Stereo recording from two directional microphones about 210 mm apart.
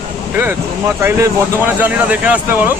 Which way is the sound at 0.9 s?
15° right (ahead or behind).